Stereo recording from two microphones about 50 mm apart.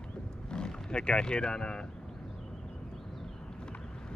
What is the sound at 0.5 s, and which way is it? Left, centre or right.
Speech, centre.